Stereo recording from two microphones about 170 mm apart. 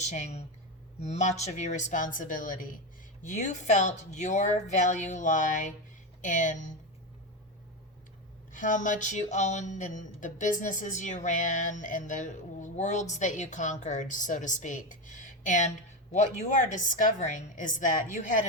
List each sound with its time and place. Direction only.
0.0 s speech: 40° left (ahead or behind)
8.5 s speech: 50° left (ahead or behind)